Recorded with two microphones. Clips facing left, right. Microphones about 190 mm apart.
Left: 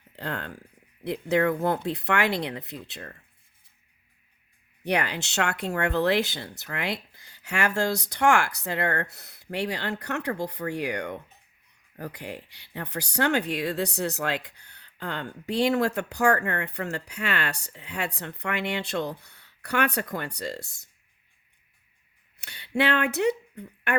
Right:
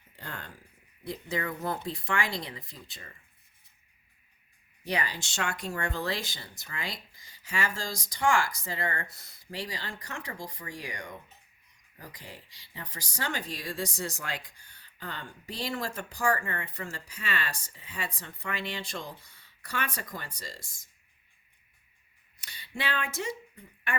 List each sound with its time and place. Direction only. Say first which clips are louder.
0.2 s a sound: left 9 dB; 65° left (ahead or behind)
1.0 s speech: left 10 dB; 65° left (ahead or behind)
4.8 s speech: left 6 dB; 65° left (ahead or behind)
22.4 s speech: left 12 dB; 65° left (ahead or behind)